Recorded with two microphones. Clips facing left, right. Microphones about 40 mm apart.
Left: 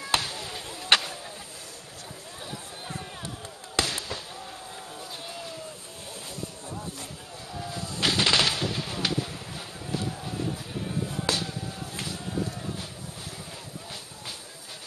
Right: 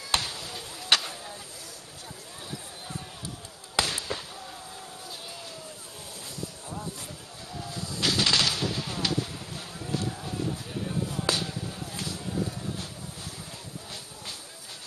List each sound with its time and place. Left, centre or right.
0.1 s basketball bounce: centre
0.4 s basketball bounce: left
3.7 s fireworks: centre
8.0 s bird: left
8.6 s a sound: centre
9.8 s vehicle: centre
11.1 s chop: centre